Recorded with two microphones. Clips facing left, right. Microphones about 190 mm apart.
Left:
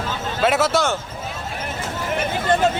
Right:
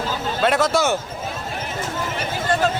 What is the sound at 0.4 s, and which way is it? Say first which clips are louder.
Speech: even; 5° left (ahead or behind).